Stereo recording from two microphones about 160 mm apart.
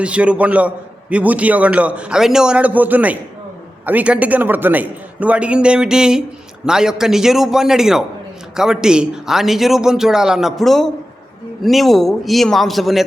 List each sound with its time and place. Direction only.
0.0 s a man's voice: 5° right (ahead or behind)